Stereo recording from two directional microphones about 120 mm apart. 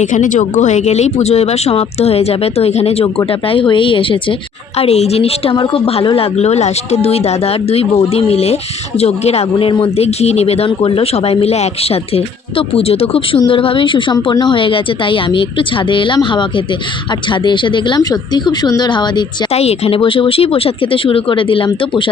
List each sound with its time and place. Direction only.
0.0 s a woman's voice: 90° left; by 4.4 s 45° left (ahead or behind)
4.8 s a woman's voice: 60° left (ahead or behind); by 19.2 s 40° left (ahead or behind)
19.5 s a woman's voice: 60° left (ahead or behind)